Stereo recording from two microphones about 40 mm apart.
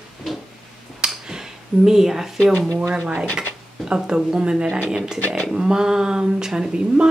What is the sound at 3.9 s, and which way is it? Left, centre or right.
A woman's voice, centre.